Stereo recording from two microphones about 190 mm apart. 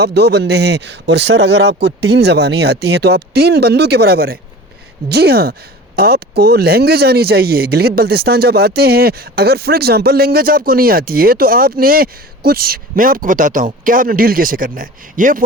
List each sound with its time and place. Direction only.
0.0 s speech: 60° right (ahead or behind)